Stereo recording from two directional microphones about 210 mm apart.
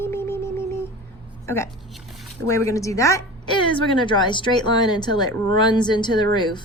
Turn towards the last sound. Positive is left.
turn(degrees=20)  # may be behind; listen again after turning